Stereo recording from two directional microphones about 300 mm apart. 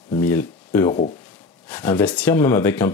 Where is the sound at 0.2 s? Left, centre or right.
Centre.